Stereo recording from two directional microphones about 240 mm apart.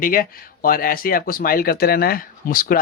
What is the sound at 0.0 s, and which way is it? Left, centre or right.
Speech, left.